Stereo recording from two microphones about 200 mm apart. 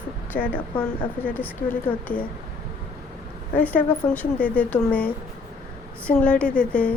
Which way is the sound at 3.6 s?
5° left (ahead or behind).